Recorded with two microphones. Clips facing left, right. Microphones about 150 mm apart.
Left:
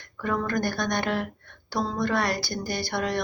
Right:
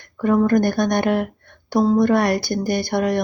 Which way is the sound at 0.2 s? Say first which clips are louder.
Right 10 dB; 40° right (ahead or behind).